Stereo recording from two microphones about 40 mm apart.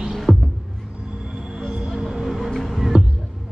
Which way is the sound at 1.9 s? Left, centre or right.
Centre.